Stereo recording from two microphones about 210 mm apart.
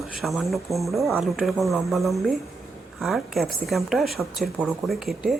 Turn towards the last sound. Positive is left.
turn(degrees=0)  # may be behind; listen again after turning